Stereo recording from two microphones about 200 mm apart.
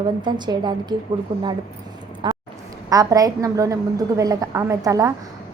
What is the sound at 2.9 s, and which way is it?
A woman's voice, 15° right (ahead or behind).